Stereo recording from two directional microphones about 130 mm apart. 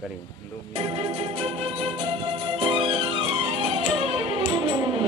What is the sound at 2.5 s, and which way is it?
Music, 40° right (ahead or behind).